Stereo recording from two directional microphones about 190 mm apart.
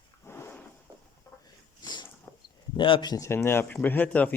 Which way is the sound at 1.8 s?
25° left (ahead or behind).